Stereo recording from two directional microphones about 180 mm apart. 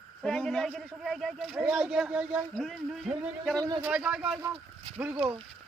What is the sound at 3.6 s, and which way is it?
Speech, 25° right (ahead or behind).